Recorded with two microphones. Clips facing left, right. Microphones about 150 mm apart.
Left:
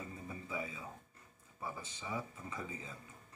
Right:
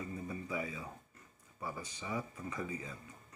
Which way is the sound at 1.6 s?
25° left (ahead or behind).